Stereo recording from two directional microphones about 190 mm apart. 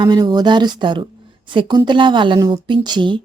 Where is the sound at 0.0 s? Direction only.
20° right (ahead or behind).